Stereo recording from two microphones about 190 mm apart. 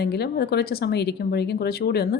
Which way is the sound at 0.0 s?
60° left (ahead or behind).